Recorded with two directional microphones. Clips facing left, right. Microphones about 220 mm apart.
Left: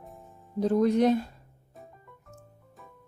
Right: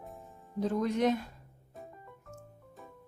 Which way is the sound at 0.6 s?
35° left (ahead or behind).